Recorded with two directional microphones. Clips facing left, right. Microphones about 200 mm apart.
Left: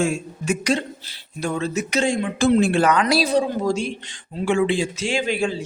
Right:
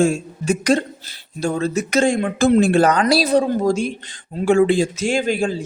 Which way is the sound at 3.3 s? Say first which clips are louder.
Right 4 dB; 50° right (ahead or behind).